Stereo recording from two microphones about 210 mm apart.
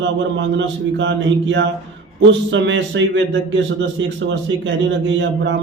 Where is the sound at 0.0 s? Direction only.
60° right (ahead or behind).